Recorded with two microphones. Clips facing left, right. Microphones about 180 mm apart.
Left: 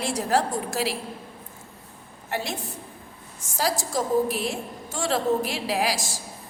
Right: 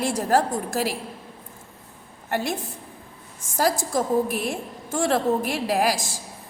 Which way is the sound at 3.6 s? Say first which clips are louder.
Right 3 dB; 55° right (ahead or behind).